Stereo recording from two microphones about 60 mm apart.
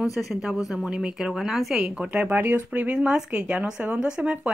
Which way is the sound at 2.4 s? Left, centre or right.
Right.